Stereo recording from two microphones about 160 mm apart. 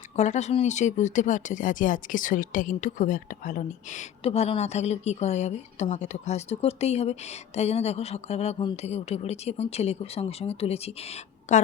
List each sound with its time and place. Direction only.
0.2 s speech: 45° left (ahead or behind)